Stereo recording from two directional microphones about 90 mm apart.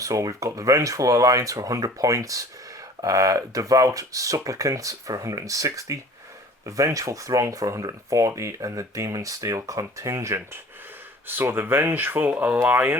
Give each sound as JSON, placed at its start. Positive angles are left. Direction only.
{"t": 0.0, "sound": "speech", "side_deg": -35}